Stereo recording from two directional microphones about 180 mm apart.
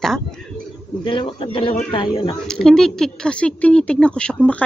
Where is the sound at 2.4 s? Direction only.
5° left (ahead or behind).